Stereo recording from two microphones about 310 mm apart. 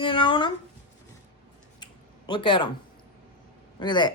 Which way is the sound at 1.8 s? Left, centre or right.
Centre.